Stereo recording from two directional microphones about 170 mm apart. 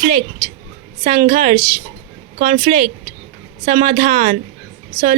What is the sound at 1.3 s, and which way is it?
Speech, 55° right (ahead or behind).